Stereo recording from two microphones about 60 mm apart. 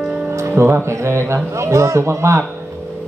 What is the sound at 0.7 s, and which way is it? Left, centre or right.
A man's voice, right.